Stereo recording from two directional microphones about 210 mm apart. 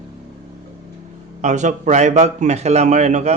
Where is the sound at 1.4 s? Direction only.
35° right (ahead or behind).